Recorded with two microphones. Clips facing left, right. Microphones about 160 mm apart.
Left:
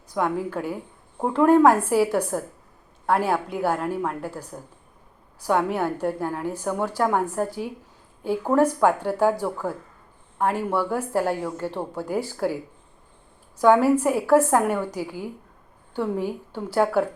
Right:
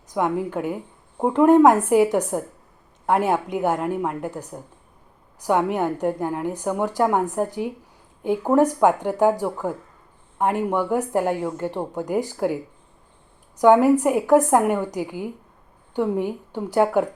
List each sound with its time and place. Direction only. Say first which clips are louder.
0.1 s a woman's voice: right 2 dB; 15° right (ahead or behind)
13.6 s a woman's voice: right 3 dB; 15° right (ahead or behind)